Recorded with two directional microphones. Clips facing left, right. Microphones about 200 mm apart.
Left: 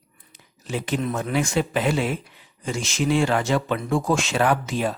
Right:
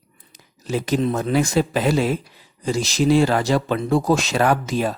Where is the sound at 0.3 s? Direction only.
40° right (ahead or behind).